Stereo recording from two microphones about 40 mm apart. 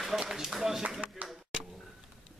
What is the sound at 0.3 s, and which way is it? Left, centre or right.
Speech, centre.